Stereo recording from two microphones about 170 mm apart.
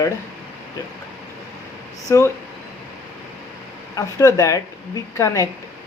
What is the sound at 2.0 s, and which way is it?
Speech, 20° left (ahead or behind).